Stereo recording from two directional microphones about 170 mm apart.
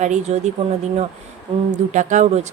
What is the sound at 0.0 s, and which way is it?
Speech, 45° right (ahead or behind).